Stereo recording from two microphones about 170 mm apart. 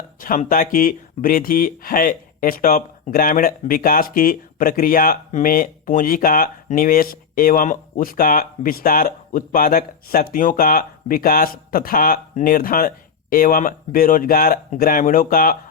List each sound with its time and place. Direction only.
0.2 s speech: 55° left (ahead or behind)